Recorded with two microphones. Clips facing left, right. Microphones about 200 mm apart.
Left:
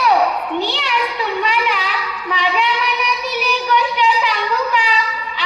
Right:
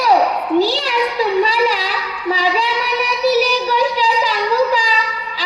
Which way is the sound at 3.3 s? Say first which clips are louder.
Right 6 dB; 35° right (ahead or behind).